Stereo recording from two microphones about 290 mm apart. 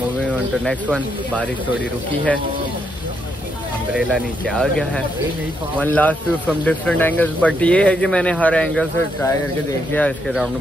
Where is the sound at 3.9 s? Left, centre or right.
Centre.